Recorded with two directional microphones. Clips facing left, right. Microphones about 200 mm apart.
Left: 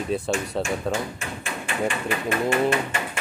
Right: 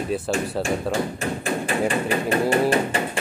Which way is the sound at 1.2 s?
40° right (ahead or behind).